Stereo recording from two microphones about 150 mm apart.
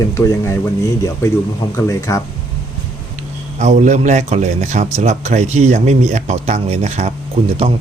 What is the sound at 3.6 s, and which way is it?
A man's voice, 50° right (ahead or behind).